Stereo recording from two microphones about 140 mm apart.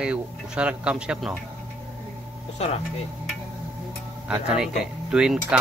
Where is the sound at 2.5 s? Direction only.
50° left (ahead or behind).